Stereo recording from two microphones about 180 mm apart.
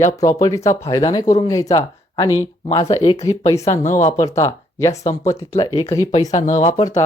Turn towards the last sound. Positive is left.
turn(degrees=20)  # may be behind; listen again after turning